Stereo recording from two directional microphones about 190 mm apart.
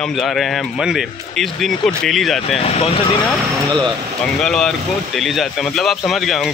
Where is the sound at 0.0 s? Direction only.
Centre (ahead or behind).